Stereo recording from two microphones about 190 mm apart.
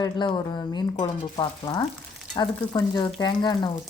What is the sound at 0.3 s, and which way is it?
Speech, 20° left (ahead or behind).